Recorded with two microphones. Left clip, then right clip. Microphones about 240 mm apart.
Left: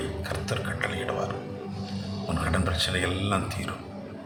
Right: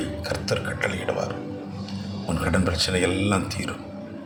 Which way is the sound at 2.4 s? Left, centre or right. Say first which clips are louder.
Right 4 dB; centre.